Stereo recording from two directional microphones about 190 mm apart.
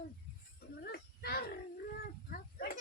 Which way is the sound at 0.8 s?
55° left (ahead or behind).